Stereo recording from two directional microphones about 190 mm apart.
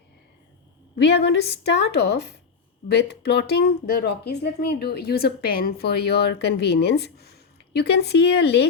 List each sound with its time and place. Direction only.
0.9 s speech: 60° left (ahead or behind)